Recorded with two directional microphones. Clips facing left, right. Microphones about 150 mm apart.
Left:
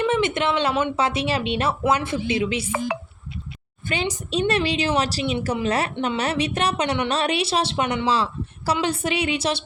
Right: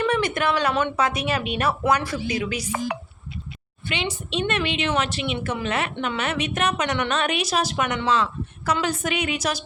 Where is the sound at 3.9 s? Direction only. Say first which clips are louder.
Left 3 dB; 40° left (ahead or behind).